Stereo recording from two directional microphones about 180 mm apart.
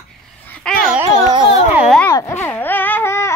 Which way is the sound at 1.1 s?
25° right (ahead or behind).